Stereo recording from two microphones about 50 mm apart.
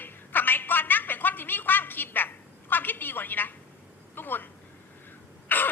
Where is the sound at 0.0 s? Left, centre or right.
Left.